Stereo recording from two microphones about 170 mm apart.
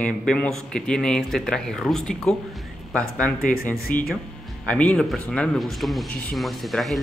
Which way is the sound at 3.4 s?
60° left (ahead or behind).